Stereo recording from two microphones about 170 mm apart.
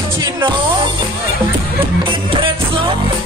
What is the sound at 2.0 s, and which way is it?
Music, 30° right (ahead or behind).